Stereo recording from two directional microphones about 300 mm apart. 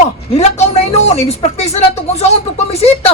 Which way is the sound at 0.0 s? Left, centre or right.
Left.